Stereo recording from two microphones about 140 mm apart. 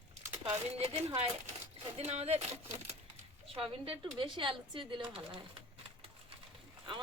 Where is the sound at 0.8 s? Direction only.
45° right (ahead or behind).